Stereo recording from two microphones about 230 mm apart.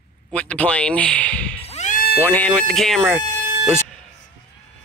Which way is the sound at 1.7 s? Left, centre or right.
Left.